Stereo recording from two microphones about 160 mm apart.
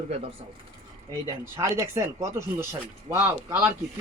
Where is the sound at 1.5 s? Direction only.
20° right (ahead or behind).